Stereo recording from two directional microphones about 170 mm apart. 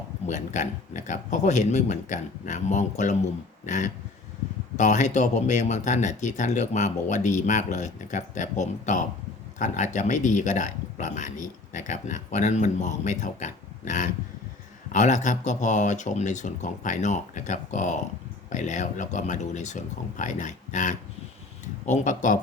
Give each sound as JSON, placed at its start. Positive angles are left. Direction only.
{"t": 0.3, "sound": "speech", "side_deg": 45}